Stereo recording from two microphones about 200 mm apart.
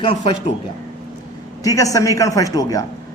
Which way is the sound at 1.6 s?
15° left (ahead or behind).